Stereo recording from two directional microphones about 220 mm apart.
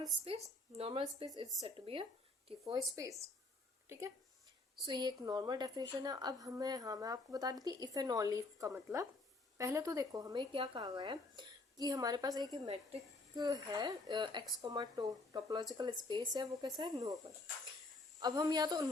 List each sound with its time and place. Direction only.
0.8 s a woman's voice: 25° right (ahead or behind)
4.9 s a woman's voice: 20° right (ahead or behind)